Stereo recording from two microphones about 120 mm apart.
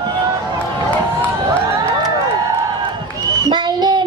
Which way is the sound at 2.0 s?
30° right (ahead or behind).